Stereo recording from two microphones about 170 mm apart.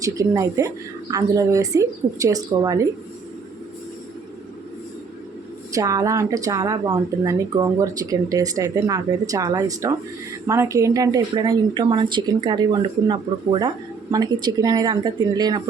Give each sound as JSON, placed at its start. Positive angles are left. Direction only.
{"t": 0.0, "sound": "speech", "side_deg": -20}
{"t": 5.7, "sound": "speech", "side_deg": -20}